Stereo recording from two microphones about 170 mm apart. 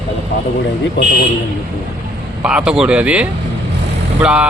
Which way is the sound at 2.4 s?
5° right (ahead or behind).